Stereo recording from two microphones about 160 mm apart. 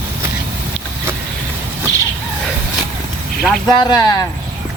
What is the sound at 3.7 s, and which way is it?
Speech, 25° left (ahead or behind).